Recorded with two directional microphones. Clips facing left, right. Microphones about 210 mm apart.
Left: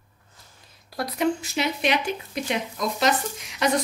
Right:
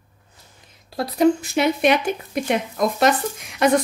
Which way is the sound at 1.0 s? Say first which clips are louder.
Right 7 dB; 30° right (ahead or behind).